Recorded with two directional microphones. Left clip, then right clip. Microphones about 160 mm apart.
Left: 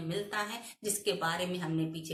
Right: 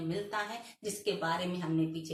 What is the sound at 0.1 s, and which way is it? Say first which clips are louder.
A woman's voice: left 2 dB; 20° left (ahead or behind).